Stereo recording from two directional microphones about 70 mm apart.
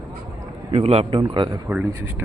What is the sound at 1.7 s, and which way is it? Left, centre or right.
Speech, right.